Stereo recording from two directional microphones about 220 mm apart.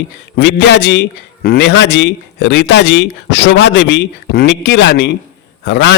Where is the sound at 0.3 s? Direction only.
50° left (ahead or behind).